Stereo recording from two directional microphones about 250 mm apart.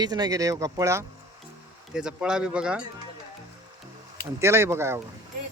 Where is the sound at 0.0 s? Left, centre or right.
Centre.